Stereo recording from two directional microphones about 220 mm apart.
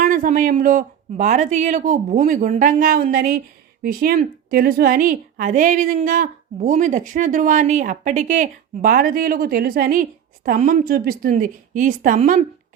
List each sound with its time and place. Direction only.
0.0 s a woman's voice: 35° right (ahead or behind)